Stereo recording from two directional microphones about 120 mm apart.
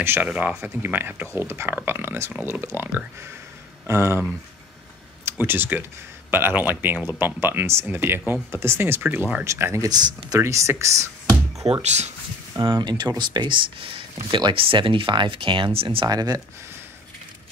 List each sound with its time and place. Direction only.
0.0 s speech: 20° right (ahead or behind)
0.3 s speech: 5° right (ahead or behind)
0.6 s speech: 15° right (ahead or behind)
5.2 s speech: 15° right (ahead or behind)
9.8 s speech: 35° right (ahead or behind)
11.6 s speech: 55° right (ahead or behind)
12.5 s speech: 40° right (ahead or behind)
16.1 s speech: 30° right (ahead or behind)